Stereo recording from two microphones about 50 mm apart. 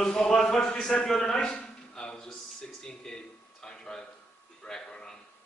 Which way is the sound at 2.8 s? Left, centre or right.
Centre.